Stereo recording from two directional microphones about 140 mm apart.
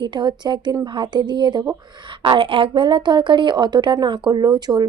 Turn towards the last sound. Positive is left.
turn(degrees=-30)  # may be behind; listen again after turning